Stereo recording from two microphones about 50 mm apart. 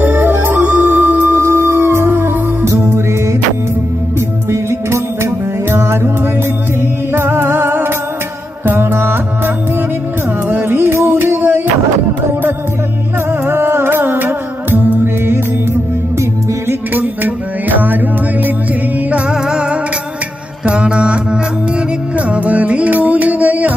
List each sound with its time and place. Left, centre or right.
0.0 s music: right
4.5 s music: right
7.2 s music: right
10.5 s music: right
13.3 s music: right
16.9 s music: right
19.3 s music: centre
20.6 s mantra: right
22.1 s music: right